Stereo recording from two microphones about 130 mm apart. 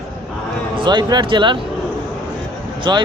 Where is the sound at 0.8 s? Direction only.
35° right (ahead or behind).